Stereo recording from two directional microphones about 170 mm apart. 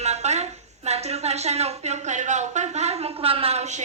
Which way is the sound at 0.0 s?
40° right (ahead or behind).